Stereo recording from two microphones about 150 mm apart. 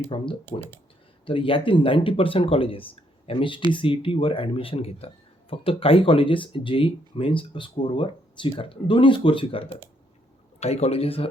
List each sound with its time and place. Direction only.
0.1 s speech: 35° left (ahead or behind)